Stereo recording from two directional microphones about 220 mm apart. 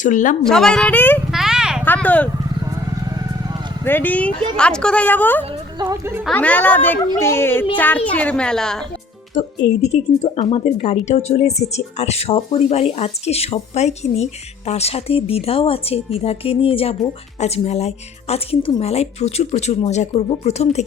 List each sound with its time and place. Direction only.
0.0 s a woman's voice: 35° left (ahead or behind)
0.4 s a woman's voice: 5° left (ahead or behind)
1.3 s a sound: centre (ahead or behind)
1.8 s speech: 10° left (ahead or behind)
3.8 s speech: 10° left (ahead or behind)
5.8 s speech: 10° right (ahead or behind)
6.2 s a woman's voice: 5° left (ahead or behind)
9.9 s speech: 30° left (ahead or behind)